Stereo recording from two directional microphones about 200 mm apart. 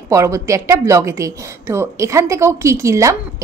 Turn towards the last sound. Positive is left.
turn(degrees=-15)  # may be behind; listen again after turning